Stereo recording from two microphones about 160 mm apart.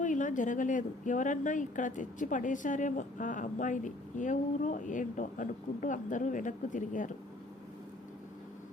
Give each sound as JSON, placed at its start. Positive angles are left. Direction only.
{"t": 0.0, "sound": "a woman's voice", "side_deg": 50}